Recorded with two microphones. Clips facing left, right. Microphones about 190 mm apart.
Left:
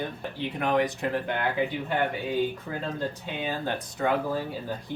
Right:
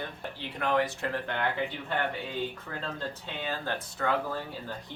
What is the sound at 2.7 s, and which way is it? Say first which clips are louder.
Speech: left 5 dB; 15° left (ahead or behind).